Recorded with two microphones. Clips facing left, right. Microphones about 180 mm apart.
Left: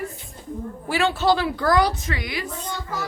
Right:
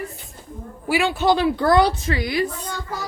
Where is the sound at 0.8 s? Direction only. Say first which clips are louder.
Right 2 dB; 10° right (ahead or behind); by 2.5 s 35° right (ahead or behind).